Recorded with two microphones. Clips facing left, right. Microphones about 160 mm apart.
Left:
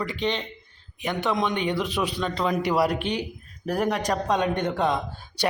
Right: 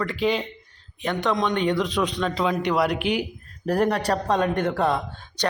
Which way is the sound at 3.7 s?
10° left (ahead or behind).